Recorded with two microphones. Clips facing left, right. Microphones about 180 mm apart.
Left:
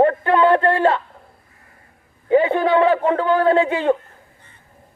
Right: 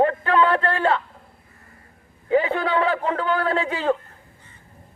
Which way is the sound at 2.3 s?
30° left (ahead or behind).